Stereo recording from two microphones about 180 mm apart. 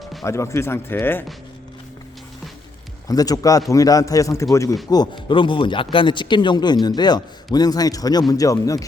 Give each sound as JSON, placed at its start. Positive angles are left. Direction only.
{"t": 0.0, "sound": "music", "side_deg": 0}
{"t": 0.3, "sound": "speech", "side_deg": 15}
{"t": 3.1, "sound": "speech", "side_deg": 20}